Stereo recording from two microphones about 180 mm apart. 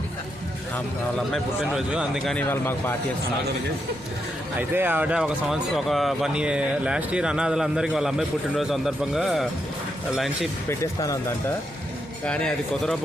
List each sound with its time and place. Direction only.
1.3 s speech: centre (ahead or behind)
4.5 s speech: 10° right (ahead or behind)
10.7 s speech: 20° left (ahead or behind)
12.2 s speech: 5° left (ahead or behind)